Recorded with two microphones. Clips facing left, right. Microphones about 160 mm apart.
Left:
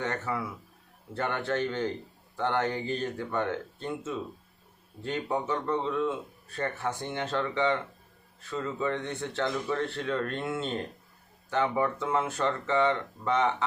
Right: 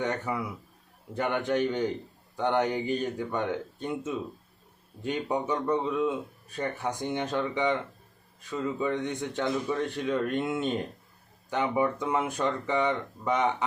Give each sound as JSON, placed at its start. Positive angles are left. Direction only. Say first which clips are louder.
{"t": 0.0, "sound": "a man's voice", "louder": "right 2 dB", "side_deg": -15}